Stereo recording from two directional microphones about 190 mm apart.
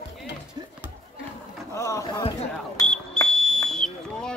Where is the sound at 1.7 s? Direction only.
15° left (ahead or behind).